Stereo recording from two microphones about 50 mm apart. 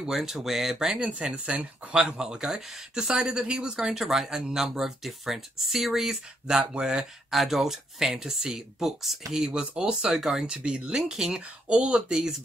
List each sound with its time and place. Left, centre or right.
0.0 s speech: centre
1.0 s speech: right
10.1 s speech: centre
10.4 s speech: centre